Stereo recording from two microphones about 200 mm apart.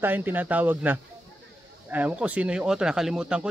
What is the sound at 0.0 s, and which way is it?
Speech, 10° right (ahead or behind).